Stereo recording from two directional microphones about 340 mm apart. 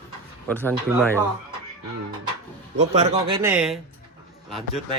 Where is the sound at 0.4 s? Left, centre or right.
Centre.